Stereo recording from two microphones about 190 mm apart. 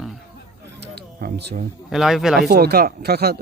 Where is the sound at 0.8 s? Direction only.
60° right (ahead or behind).